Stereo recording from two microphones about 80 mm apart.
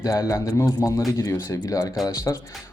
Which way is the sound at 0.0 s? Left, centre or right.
Left.